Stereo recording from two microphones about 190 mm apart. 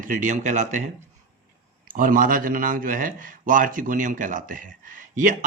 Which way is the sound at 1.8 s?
45° right (ahead or behind).